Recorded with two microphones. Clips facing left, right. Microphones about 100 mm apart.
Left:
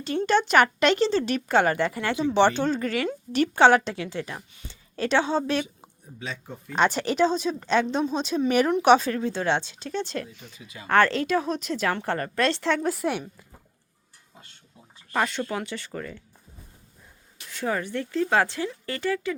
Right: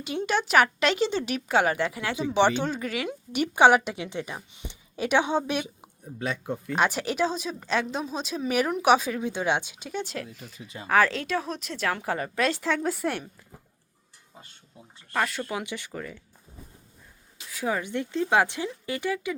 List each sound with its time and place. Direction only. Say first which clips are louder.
0.0 s a woman's voice: left 4 dB; 10° right (ahead or behind)
6.1 s speech: right 6 dB; 55° right (ahead or behind)
6.7 s speech: left 4 dB; 5° right (ahead or behind)
15.1 s a woman's voice: left 2 dB; centre (ahead or behind)
16.0 s speech: left 2 dB; 5° right (ahead or behind)
17.5 s a woman's voice: left 1 dB; 10° right (ahead or behind)